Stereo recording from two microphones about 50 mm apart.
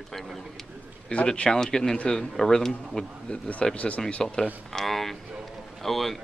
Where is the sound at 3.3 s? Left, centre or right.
Left.